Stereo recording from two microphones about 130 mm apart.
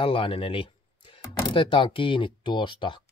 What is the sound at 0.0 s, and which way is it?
Speech, 40° left (ahead or behind).